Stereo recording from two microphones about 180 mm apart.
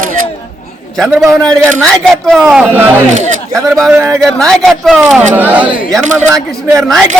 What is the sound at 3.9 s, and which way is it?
Speech, 10° right (ahead or behind).